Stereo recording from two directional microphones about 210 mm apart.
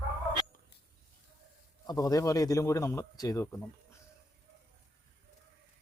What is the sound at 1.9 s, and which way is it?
A man's voice, 15° left (ahead or behind).